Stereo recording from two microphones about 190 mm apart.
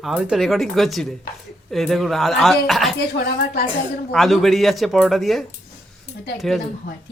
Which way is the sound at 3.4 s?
50° left (ahead or behind).